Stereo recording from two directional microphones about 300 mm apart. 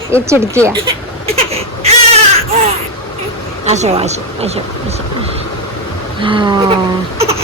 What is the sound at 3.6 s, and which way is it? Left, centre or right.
Speech, right.